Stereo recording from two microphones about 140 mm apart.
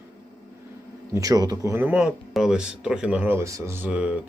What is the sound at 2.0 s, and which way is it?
Speech, 5° right (ahead or behind).